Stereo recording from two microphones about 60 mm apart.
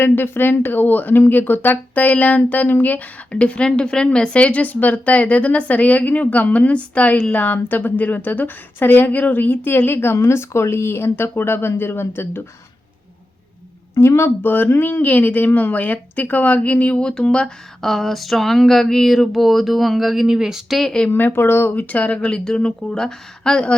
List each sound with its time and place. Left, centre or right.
0.0 s a woman's voice: left
13.9 s a woman's voice: left; by 17.5 s centre
17.8 s a sound: centre
21.1 s speech: left
21.8 s a woman's voice: left